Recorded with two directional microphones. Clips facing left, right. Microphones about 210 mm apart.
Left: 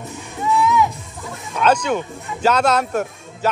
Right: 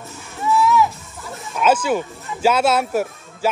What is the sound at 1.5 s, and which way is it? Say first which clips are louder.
Speech: even; 5° right (ahead or behind).